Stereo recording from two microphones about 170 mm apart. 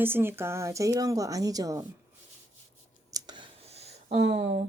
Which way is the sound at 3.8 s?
40° right (ahead or behind).